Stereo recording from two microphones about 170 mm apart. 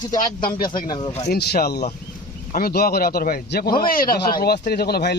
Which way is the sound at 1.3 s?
70° left (ahead or behind).